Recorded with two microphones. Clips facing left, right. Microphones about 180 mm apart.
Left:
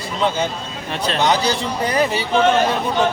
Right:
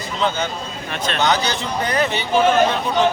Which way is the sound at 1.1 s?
30° left (ahead or behind).